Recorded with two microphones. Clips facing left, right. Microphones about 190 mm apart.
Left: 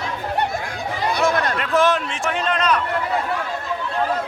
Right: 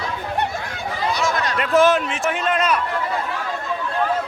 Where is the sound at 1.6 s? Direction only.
5° right (ahead or behind).